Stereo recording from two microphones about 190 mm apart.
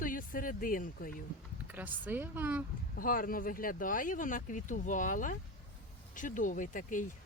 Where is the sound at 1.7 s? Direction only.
10° right (ahead or behind).